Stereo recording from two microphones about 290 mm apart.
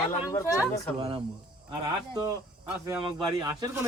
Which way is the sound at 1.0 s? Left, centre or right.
Right.